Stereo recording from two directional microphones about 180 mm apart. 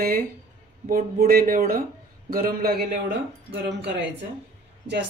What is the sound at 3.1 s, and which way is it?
Speech, 75° right (ahead or behind).